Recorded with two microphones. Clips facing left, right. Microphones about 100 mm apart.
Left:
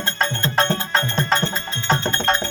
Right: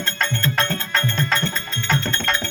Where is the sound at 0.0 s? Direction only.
35° left (ahead or behind).